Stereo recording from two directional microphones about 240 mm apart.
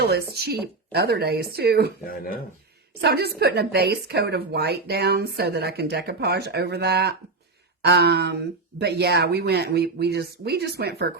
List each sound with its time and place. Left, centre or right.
0.3 s speech: right
2.0 s speech: left
3.0 s a woman's voice: right